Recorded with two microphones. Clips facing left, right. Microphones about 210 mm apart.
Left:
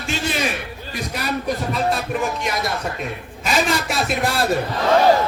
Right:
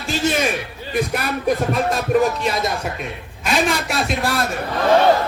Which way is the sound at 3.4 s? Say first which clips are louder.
Right 1 dB; centre (ahead or behind).